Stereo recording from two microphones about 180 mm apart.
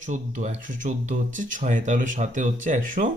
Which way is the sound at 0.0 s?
45° right (ahead or behind).